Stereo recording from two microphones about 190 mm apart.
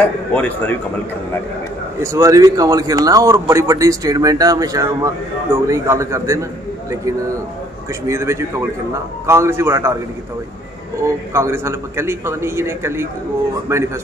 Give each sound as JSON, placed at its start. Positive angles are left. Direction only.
{"t": 0.3, "sound": "speech", "side_deg": 10}
{"t": 2.0, "sound": "a man's voice", "side_deg": -15}
{"t": 11.1, "sound": "a man's voice", "side_deg": -15}